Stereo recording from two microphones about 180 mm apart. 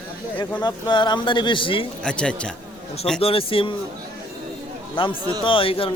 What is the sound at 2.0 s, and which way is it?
Speech, 5° left (ahead or behind).